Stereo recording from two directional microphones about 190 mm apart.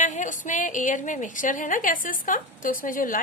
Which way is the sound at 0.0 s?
40° left (ahead or behind).